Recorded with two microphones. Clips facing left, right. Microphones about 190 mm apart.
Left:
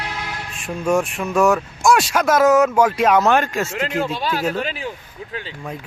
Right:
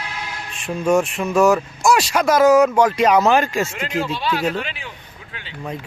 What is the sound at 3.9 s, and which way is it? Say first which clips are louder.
Speech: right 2 dB; 45° left (ahead or behind).